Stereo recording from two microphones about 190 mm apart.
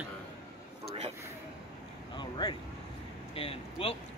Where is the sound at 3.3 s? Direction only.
30° left (ahead or behind).